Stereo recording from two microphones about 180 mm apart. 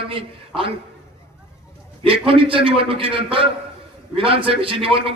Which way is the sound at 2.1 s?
30° right (ahead or behind).